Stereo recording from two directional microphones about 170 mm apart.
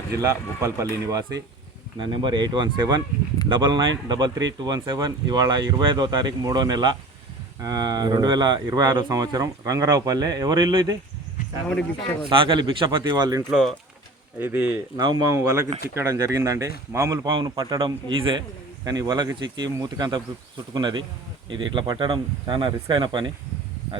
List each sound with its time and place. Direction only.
0.2 s speech: 20° right (ahead or behind)
11.7 s speech: 5° left (ahead or behind)
12.3 s a man's voice: 30° right (ahead or behind)
13.5 s speech: centre (ahead or behind)
14.9 s speech: 25° right (ahead or behind)